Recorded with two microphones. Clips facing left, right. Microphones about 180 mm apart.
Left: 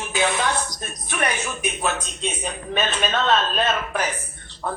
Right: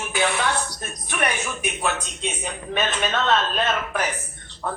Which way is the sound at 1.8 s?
15° left (ahead or behind).